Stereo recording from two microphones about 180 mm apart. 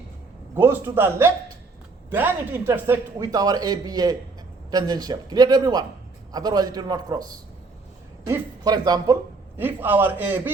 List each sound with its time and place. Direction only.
0.5 s a man's voice: 10° right (ahead or behind)
9.6 s a man's voice: 10° right (ahead or behind)